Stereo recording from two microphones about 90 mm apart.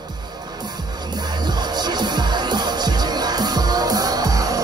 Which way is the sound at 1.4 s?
50° right (ahead or behind).